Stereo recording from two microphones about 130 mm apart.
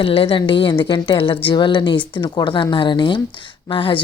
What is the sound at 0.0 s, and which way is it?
Speech, 45° left (ahead or behind).